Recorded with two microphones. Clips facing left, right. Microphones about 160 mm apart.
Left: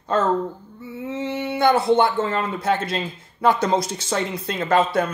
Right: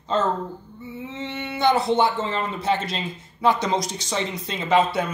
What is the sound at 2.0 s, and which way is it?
Speech, 55° left (ahead or behind).